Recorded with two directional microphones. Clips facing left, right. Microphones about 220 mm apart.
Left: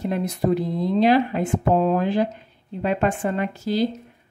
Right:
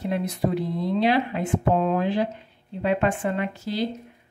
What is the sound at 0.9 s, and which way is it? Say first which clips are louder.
A woman's voice: left 4 dB; 45° left (ahead or behind).